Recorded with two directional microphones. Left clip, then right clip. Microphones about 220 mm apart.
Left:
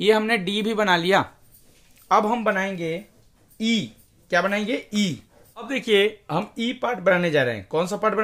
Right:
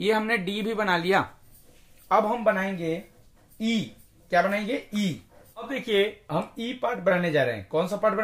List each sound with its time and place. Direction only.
0.0 s speech: 30° left (ahead or behind)
2.0 s speech: 40° left (ahead or behind)